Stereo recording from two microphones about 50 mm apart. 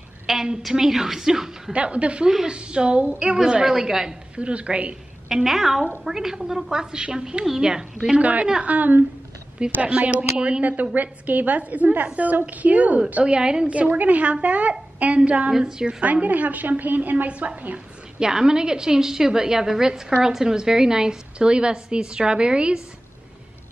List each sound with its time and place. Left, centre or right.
0.3 s a woman's voice: centre
1.7 s a woman's voice: right
4.4 s a woman's voice: right
5.3 s a woman's voice: centre
8.2 s a woman's voice: right
9.6 s a woman's voice: right
10.6 s a woman's voice: right
13.2 s a woman's voice: centre
13.7 s a woman's voice: right
15.5 s a woman's voice: centre
16.0 s a woman's voice: right
18.2 s a woman's voice: centre